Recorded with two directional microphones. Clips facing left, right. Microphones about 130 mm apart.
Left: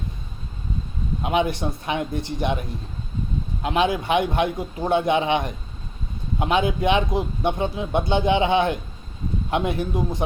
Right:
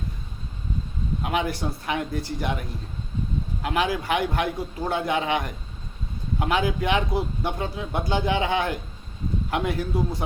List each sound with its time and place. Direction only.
1.2 s a man's voice: 20° left (ahead or behind)